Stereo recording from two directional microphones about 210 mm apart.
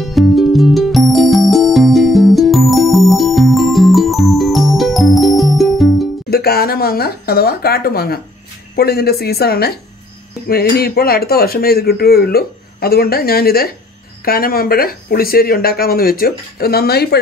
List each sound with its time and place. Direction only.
0.0 s music: centre (ahead or behind)
6.3 s a sound: 45° left (ahead or behind)
8.7 s speech: 50° left (ahead or behind)